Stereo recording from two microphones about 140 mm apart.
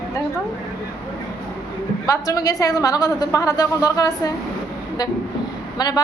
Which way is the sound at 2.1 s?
25° left (ahead or behind).